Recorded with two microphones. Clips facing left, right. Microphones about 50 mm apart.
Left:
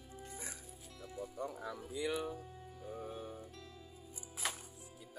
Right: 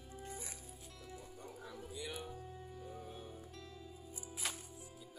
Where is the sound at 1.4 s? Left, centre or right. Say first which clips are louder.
Left 9 dB; left.